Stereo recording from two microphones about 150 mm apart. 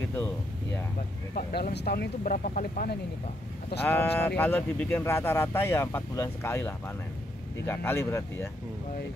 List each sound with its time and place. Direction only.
1.3 s speech: 90° left; by 3.0 s 65° left (ahead or behind)
3.8 s speech: 10° left (ahead or behind)